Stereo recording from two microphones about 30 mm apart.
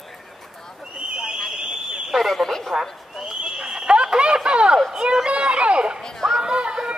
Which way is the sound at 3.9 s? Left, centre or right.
Right.